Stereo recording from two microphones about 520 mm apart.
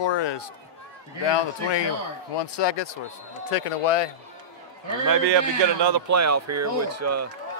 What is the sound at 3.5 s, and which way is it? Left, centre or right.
Speech, left.